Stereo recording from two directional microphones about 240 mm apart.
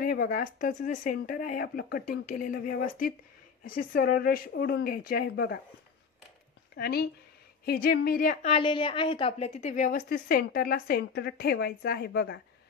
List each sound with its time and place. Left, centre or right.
0.0 s a woman's voice: left
6.8 s a woman's voice: left